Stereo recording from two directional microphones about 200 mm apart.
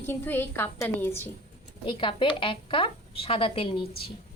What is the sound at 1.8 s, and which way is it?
A woman's voice, 25° left (ahead or behind).